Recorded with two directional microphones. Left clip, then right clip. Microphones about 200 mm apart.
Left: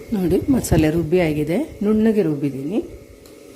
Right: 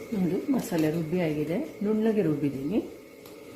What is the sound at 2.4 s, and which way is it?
Speech, 25° left (ahead or behind).